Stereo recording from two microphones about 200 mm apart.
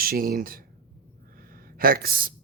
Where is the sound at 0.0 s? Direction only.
45° right (ahead or behind).